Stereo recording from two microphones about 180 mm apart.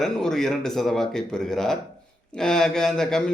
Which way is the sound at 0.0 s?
Centre (ahead or behind).